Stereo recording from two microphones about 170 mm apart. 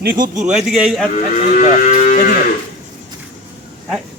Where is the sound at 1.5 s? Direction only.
45° left (ahead or behind).